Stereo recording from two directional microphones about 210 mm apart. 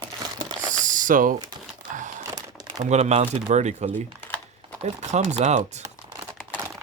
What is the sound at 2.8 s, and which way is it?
Speech, 30° right (ahead or behind).